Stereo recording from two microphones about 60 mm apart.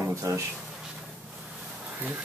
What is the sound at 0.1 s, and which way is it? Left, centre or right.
Speech, right.